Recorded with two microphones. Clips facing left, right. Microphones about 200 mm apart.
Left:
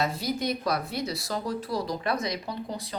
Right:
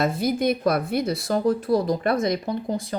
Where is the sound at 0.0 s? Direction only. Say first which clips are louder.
Right 7 dB; 50° right (ahead or behind).